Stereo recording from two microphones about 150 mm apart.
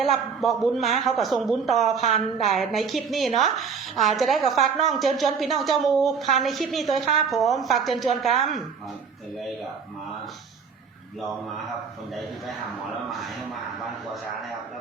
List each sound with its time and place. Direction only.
0.0 s a woman's voice: centre (ahead or behind)